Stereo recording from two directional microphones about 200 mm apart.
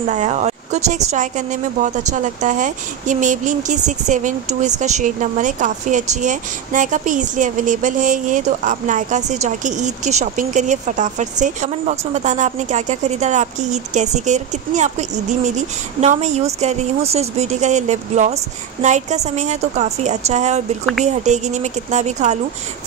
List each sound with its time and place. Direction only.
0.1 s speech: 35° right (ahead or behind)